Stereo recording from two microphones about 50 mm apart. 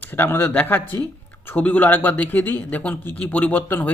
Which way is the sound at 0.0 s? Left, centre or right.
Left.